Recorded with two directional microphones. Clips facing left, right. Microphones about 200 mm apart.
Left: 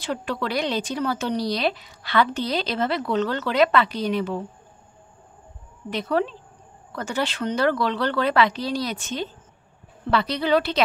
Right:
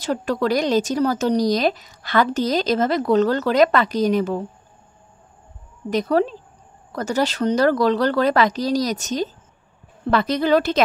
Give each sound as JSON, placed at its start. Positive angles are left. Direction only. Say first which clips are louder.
{"t": 0.0, "sound": "a woman's voice", "louder": "right 6 dB", "side_deg": -40}
{"t": 5.9, "sound": "a woman's voice", "louder": "right 5 dB", "side_deg": -40}